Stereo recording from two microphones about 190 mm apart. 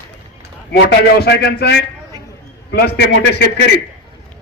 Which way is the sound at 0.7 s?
55° left (ahead or behind).